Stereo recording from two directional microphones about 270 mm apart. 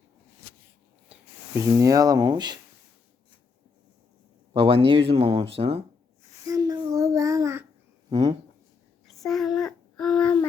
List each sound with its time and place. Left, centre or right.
1.1 s speech: centre
4.5 s speech: centre
6.5 s child singing: centre
8.1 s speech: centre
9.0 s a sound: centre